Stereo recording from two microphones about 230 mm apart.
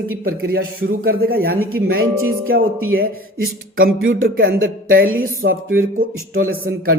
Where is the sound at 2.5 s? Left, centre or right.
Right.